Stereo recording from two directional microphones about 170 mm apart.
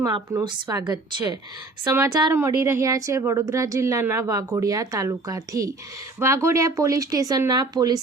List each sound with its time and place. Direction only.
0.0 s speech: 20° right (ahead or behind)